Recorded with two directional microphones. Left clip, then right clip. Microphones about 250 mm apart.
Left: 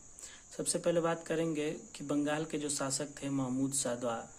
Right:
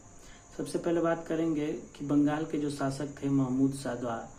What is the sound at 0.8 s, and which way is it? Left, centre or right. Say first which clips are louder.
Speech: right 3 dB; left.